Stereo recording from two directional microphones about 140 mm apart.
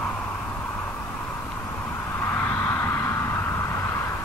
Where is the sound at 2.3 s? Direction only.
15° left (ahead or behind).